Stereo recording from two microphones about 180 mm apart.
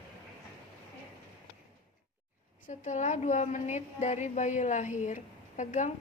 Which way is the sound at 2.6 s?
45° left (ahead or behind).